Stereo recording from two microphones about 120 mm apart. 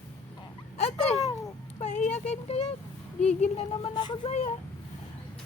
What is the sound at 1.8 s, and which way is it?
Speech, 80° left.